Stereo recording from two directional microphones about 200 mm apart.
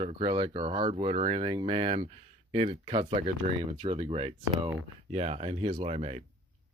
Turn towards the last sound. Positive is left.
turn(degrees=-30)  # may be behind; listen again after turning